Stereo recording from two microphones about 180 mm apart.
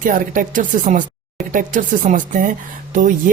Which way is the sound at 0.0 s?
45° right (ahead or behind).